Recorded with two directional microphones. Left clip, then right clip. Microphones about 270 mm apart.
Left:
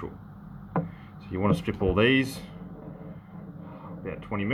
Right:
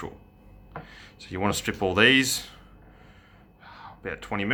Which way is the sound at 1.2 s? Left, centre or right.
Left.